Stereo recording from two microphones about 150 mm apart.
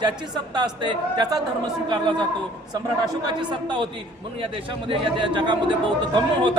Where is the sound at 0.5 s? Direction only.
30° right (ahead or behind).